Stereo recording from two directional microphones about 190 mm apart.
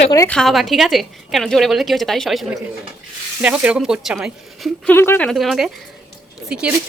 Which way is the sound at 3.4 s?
5° right (ahead or behind).